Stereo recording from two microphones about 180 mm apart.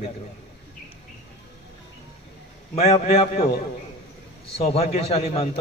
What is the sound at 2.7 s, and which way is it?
Speech, 35° left (ahead or behind).